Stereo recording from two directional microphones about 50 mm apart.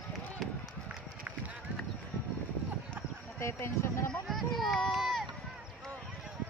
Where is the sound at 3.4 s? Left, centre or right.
Left.